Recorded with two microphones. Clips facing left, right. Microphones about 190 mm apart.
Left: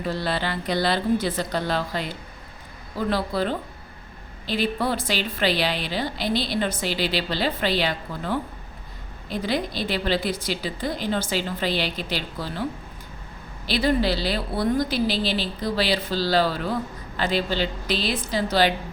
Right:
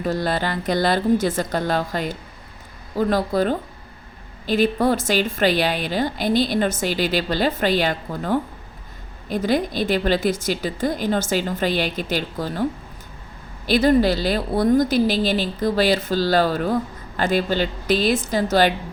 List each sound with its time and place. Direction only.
0.0 s a woman's voice: 45° right (ahead or behind)
13.7 s a woman's voice: 45° right (ahead or behind)